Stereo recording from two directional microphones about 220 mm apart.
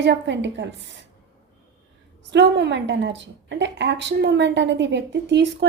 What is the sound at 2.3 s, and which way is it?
A woman's voice, 50° right (ahead or behind).